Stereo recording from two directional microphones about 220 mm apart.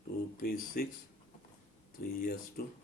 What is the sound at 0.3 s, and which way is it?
Speech, 40° left (ahead or behind).